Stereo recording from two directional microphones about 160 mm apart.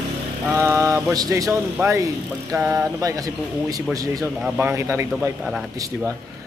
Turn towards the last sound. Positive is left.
turn(degrees=-15)  # may be behind; listen again after turning